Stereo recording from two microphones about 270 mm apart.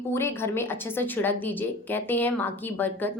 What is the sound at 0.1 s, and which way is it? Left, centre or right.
A woman's voice, centre.